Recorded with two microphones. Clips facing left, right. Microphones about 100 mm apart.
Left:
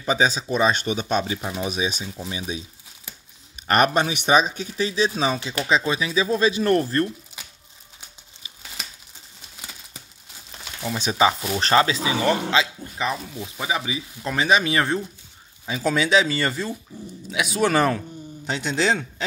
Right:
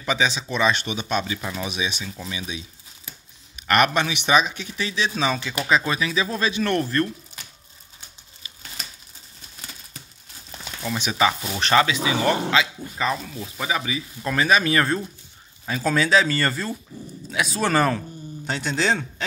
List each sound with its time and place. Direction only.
0.0 s speech: 35° left (ahead or behind)
11.1 s speech: 20° left (ahead or behind)
11.6 s speech: 30° left (ahead or behind)
12.9 s speech: 10° left (ahead or behind)